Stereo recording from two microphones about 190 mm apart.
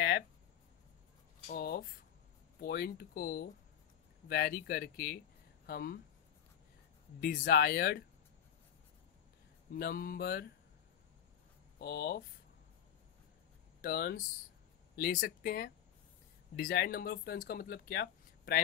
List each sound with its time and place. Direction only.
1.5 s a sound: 50° left (ahead or behind)
2.6 s speech: 55° left (ahead or behind)
7.2 s speech: 50° left (ahead or behind)
9.8 s speech: 50° left (ahead or behind)
11.8 s speech: 55° left (ahead or behind)
13.7 s speech: 50° left (ahead or behind)